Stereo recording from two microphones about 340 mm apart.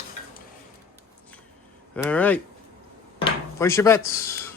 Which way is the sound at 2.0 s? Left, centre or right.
Centre.